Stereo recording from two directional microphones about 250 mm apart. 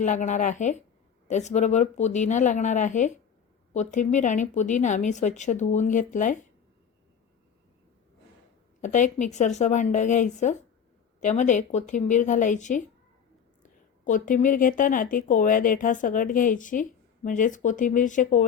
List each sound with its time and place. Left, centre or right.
0.0 s speech: left
8.8 s a woman's voice: left